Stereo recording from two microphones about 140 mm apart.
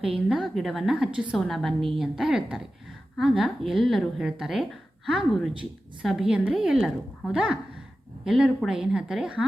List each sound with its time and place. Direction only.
0.0 s speech: centre (ahead or behind)